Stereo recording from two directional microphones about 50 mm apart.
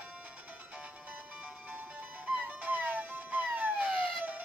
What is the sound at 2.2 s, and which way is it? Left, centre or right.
Music, right.